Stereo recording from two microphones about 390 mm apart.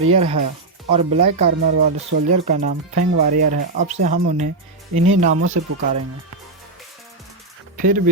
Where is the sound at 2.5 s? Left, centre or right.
Centre.